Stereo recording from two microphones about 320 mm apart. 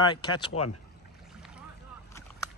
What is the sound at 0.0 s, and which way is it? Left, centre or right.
Speech, centre.